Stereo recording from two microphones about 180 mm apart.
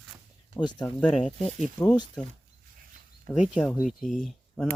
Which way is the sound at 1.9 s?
25° left (ahead or behind).